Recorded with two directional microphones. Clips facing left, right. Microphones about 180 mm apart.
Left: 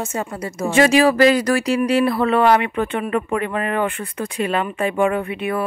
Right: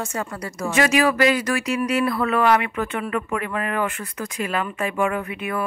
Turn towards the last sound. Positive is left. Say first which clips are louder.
# left 4 dB
turn(degrees=30)  # may be behind; listen again after turning